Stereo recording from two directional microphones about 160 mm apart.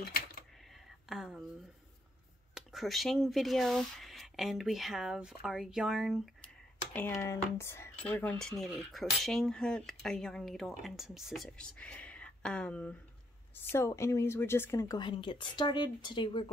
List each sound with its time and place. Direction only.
0.0 s coin: 80° left
1.0 s a sound: centre (ahead or behind)
2.5 s a woman's voice: centre (ahead or behind); by 16.4 s 30° left (ahead or behind)